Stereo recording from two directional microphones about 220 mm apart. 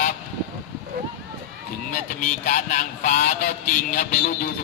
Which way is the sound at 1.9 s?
35° left (ahead or behind).